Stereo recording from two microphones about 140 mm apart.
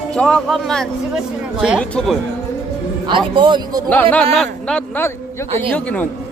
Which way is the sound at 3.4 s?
30° right (ahead or behind).